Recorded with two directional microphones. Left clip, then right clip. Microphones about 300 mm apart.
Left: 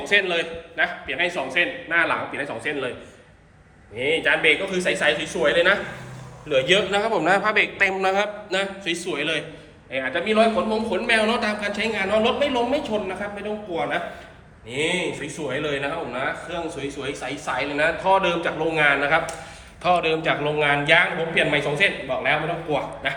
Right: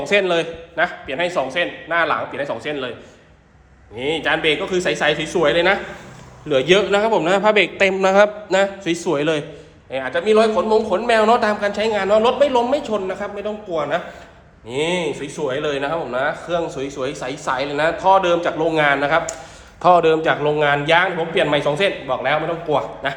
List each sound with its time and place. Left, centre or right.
0.0 s a man's voice: centre
3.9 s a man's voice: centre
14.7 s a man's voice: centre